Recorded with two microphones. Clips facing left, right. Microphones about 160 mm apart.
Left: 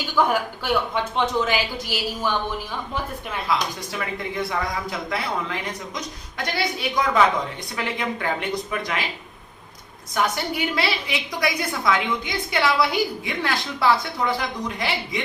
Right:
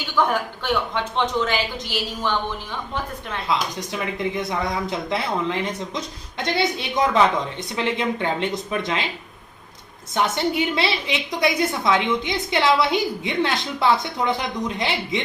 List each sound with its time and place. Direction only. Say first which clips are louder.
0.3 s a woman's voice: even; 5° left (ahead or behind)
3.5 s a woman's voice: right 1 dB; 20° right (ahead or behind)
10.2 s a woman's voice: right 3 dB; 25° right (ahead or behind)